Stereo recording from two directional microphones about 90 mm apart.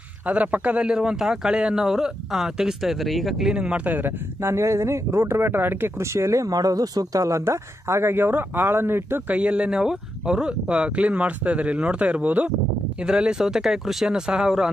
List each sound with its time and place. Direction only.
0.3 s a man's voice: 15° right (ahead or behind)
9.4 s speech: 15° right (ahead or behind)